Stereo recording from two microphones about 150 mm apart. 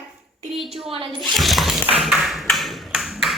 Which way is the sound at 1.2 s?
Centre (ahead or behind).